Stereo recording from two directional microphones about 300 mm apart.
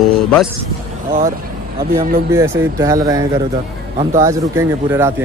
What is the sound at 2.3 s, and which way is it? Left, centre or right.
Speech, centre.